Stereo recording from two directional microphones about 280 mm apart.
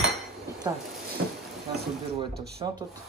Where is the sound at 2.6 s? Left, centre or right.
Centre.